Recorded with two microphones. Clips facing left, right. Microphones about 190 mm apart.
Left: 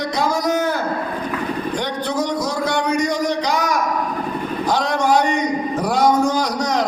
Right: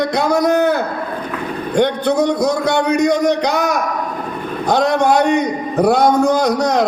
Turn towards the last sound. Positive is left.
turn(degrees=-65)  # may be behind; listen again after turning